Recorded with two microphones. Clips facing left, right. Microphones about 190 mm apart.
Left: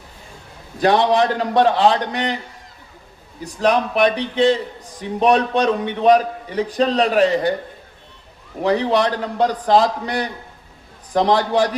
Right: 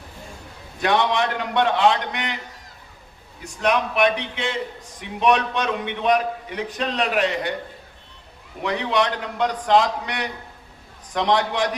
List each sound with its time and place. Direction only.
0.8 s a man's voice: 35° left (ahead or behind)
3.4 s a man's voice: 35° left (ahead or behind)
8.6 s a man's voice: 35° left (ahead or behind)